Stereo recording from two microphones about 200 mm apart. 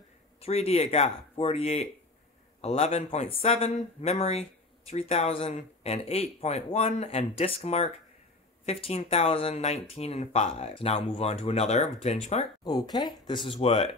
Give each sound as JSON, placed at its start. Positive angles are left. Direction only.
{"t": 0.4, "sound": "speech", "side_deg": 30}
{"t": 12.6, "sound": "speech", "side_deg": 20}